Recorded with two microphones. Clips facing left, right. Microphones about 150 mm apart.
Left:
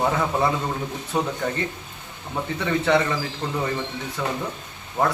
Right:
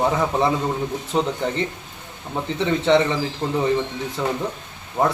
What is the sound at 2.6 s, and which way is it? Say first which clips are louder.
A man's voice: right 3 dB; 25° right (ahead or behind).